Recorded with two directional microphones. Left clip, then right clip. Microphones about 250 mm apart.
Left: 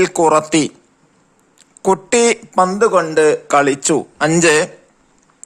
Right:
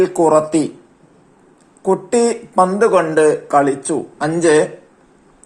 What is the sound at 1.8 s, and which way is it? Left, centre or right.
Speech, left.